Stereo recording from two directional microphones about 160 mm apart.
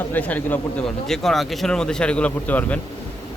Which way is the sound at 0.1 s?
10° left (ahead or behind).